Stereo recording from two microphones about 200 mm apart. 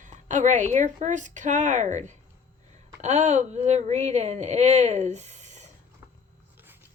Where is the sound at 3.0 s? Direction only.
35° right (ahead or behind).